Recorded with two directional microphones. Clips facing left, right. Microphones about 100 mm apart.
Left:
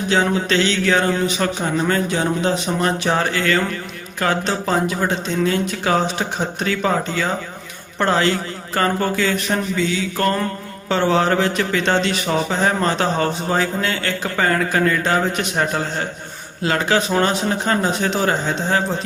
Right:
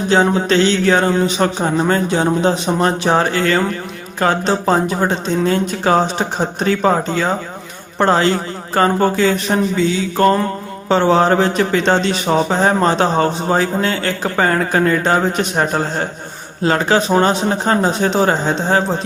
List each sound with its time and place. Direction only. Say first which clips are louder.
0.1 s a man's voice: right 4 dB; 35° right (ahead or behind)